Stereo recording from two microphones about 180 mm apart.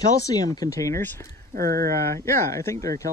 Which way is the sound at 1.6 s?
55° right (ahead or behind).